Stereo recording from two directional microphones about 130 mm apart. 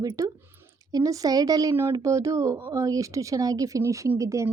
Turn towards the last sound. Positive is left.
turn(degrees=-25)  # may be behind; listen again after turning